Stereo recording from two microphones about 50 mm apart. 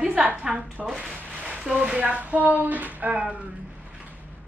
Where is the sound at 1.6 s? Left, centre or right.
Centre; by 3.2 s right.